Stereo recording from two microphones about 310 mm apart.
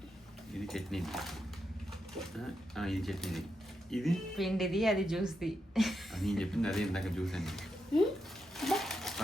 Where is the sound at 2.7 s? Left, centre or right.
Centre.